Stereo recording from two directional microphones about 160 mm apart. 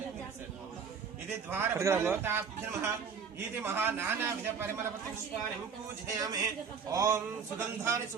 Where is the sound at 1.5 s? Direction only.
15° right (ahead or behind).